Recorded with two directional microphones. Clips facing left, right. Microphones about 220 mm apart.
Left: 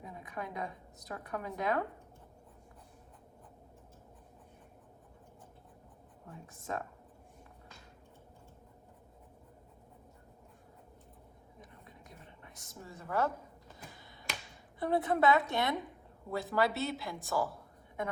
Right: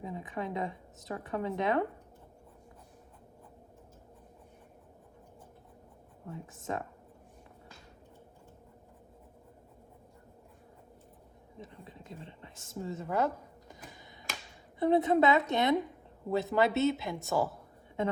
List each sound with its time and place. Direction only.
0.0 s a woman's voice: 25° right (ahead or behind)
6.3 s speech: 20° right (ahead or behind)
11.6 s a sound: 25° right (ahead or behind)
14.8 s speech: 20° right (ahead or behind)